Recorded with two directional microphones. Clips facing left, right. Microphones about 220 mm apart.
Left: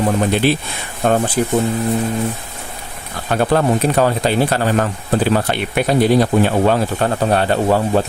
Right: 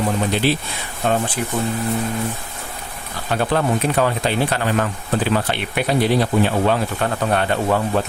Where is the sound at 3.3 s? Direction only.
45° left (ahead or behind).